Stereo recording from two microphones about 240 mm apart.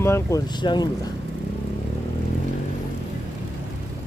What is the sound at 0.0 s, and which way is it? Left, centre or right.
Speech, centre.